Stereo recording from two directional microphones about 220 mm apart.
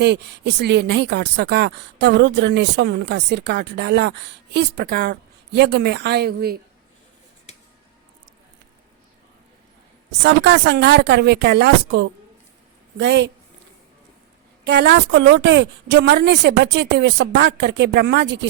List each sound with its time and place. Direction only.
0.0 s speech: 50° right (ahead or behind)
10.2 s speech: 50° right (ahead or behind)
14.6 s speech: 50° right (ahead or behind)